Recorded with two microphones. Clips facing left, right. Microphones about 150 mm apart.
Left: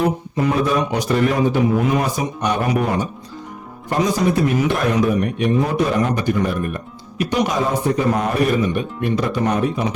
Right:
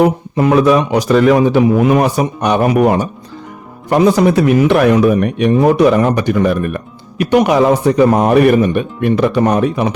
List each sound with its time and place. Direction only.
0.0 s speech: 75° right (ahead or behind)